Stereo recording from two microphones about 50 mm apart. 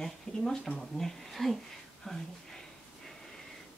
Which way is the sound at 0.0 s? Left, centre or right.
Centre.